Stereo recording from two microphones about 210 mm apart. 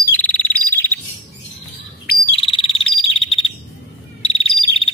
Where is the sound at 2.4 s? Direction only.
25° left (ahead or behind).